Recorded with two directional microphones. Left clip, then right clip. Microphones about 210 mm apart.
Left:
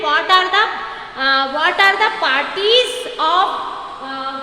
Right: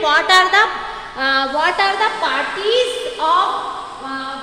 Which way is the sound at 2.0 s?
40° left (ahead or behind).